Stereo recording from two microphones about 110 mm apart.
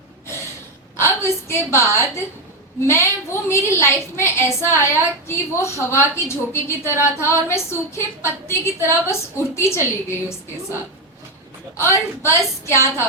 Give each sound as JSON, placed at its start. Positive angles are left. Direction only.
{"t": 0.9, "sound": "a woman's voice", "side_deg": 25}
{"t": 11.9, "sound": "a woman's voice", "side_deg": 25}